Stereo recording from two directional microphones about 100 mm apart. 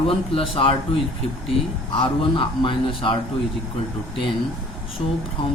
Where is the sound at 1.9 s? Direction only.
65° left (ahead or behind).